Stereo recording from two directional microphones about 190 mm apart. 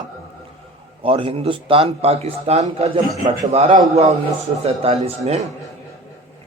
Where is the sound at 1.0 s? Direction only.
25° right (ahead or behind).